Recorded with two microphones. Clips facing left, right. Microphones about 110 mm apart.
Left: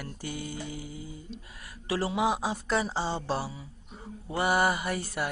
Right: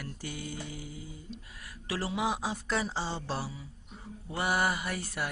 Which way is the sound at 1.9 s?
20° left (ahead or behind).